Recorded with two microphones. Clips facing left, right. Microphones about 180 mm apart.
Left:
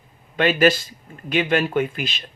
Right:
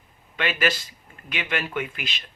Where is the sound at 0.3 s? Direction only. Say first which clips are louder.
Left 9 dB; 40° left (ahead or behind).